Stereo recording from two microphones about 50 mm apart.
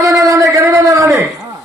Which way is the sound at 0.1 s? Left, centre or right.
Right.